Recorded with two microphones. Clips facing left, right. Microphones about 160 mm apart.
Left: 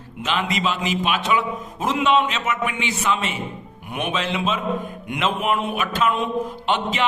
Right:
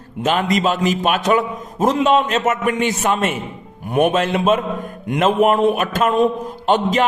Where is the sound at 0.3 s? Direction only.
45° right (ahead or behind).